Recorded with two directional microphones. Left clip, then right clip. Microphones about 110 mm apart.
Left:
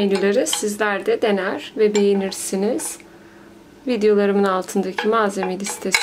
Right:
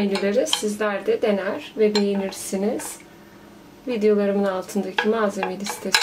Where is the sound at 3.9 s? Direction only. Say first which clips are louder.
Left 3 dB; 50° left (ahead or behind).